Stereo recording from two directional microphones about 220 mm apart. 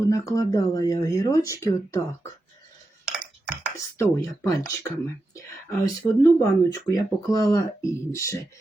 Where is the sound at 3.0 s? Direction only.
10° right (ahead or behind).